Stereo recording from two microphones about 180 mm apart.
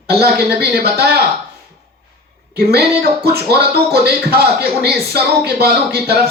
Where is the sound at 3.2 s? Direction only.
60° right (ahead or behind).